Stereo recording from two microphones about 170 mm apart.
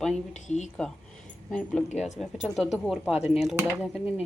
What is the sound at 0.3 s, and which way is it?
Speech, 45° left (ahead or behind).